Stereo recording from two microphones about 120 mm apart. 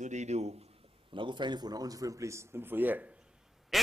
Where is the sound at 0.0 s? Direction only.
75° right (ahead or behind).